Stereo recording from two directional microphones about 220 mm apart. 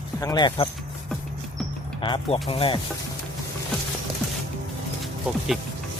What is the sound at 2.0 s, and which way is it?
Speech, 20° left (ahead or behind).